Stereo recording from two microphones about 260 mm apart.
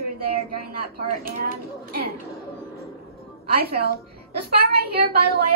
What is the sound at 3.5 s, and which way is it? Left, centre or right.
A woman's voice, right.